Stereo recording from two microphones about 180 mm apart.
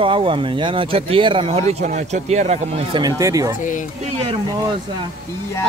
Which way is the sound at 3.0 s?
20° right (ahead or behind).